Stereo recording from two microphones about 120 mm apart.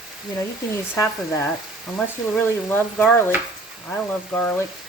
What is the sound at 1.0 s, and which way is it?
Speech, 25° left (ahead or behind).